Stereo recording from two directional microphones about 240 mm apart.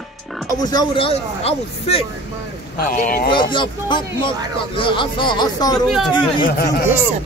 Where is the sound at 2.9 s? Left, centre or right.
Left.